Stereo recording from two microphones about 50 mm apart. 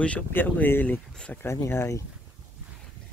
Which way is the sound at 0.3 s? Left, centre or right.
Left.